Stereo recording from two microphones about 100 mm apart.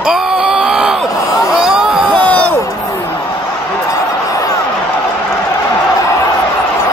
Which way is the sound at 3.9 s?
35° left (ahead or behind).